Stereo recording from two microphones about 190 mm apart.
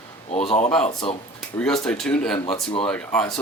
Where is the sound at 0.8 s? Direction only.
30° left (ahead or behind).